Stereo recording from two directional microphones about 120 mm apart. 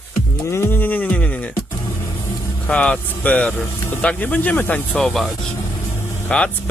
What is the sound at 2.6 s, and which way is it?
Speech, 10° left (ahead or behind).